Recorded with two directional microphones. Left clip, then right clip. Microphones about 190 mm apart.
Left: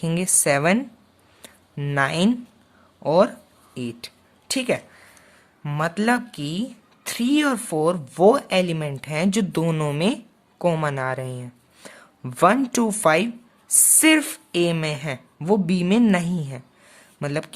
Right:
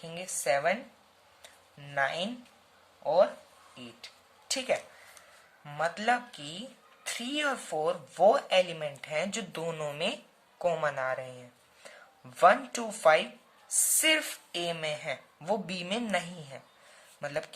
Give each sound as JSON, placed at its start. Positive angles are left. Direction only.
{"t": 0.0, "sound": "a woman's voice", "side_deg": 50}
{"t": 1.4, "sound": "a sound", "side_deg": 55}
{"t": 3.0, "sound": "speech", "side_deg": 55}